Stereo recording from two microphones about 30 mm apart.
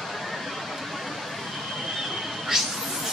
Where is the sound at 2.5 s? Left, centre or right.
Centre.